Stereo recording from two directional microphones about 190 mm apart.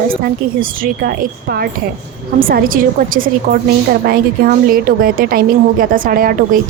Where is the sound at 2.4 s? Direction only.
50° right (ahead or behind).